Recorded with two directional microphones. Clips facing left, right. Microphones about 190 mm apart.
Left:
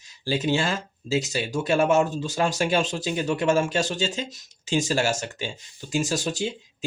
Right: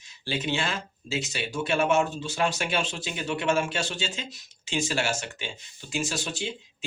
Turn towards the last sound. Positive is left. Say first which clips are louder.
# left 5 dB
turn(degrees=40)  # may be behind; listen again after turning